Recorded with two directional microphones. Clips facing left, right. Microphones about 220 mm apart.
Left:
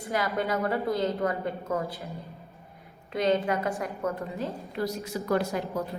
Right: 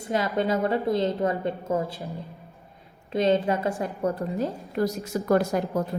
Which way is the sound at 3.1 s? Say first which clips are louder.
Right 3 dB; 25° right (ahead or behind).